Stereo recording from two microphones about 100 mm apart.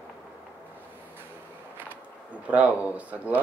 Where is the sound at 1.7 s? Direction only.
15° right (ahead or behind).